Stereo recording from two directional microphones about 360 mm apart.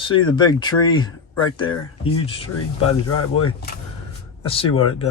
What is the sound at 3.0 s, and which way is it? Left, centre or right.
Speech, left.